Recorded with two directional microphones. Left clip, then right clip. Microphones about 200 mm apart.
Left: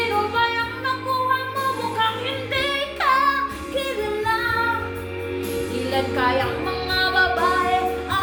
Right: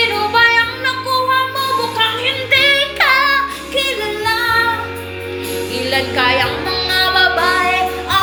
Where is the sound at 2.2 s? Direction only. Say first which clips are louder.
Right 11 dB; 15° left (ahead or behind).